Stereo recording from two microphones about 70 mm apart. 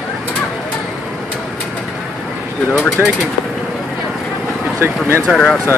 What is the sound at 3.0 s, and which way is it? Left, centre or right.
Speech, right.